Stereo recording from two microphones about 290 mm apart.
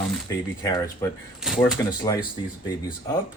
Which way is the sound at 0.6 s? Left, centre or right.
Centre.